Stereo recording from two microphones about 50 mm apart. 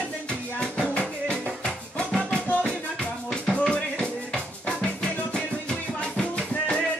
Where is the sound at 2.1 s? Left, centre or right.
Centre.